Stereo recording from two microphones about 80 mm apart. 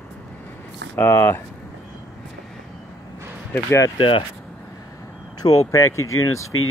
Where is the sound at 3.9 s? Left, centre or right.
Left.